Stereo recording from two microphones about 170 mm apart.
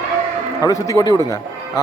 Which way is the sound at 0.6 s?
20° left (ahead or behind).